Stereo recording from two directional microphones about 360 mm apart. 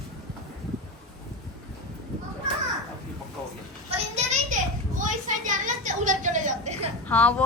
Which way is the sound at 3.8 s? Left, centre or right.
Centre.